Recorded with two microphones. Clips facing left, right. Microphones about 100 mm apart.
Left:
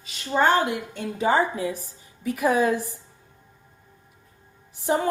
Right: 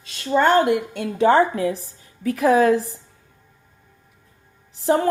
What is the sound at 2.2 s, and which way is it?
Speech, 90° right.